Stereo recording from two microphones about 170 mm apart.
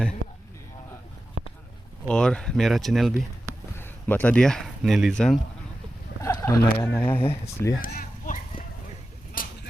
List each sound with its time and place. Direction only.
1.4 s a sound: 45° right (ahead or behind)
2.0 s speech: 5° left (ahead or behind)
3.8 s speech: 10° left (ahead or behind)
6.2 s speech: 15° left (ahead or behind)
7.8 s clip-clop: 55° left (ahead or behind)
9.4 s vehicle: 55° left (ahead or behind)